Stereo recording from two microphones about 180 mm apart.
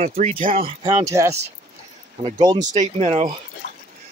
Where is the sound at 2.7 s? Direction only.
40° right (ahead or behind).